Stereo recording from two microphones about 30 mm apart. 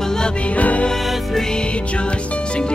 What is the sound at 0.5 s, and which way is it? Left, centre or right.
Music, left.